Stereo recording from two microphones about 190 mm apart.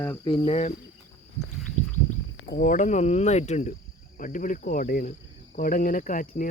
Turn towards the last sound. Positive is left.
turn(degrees=45)  # may be behind; listen again after turning